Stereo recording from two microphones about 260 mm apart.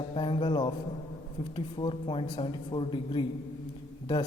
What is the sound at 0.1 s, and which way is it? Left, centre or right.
Speech, centre.